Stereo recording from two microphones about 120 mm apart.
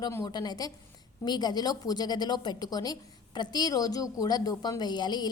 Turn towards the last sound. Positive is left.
turn(degrees=35)  # may be behind; listen again after turning